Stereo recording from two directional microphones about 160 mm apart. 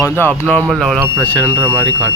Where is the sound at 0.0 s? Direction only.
15° left (ahead or behind).